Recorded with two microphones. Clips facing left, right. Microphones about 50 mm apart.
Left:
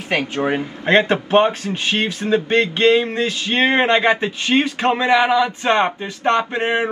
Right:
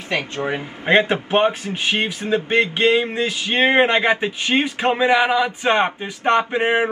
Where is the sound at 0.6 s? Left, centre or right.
Centre.